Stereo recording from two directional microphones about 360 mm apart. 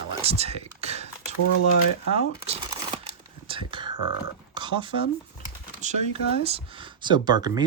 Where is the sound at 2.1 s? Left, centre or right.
Centre.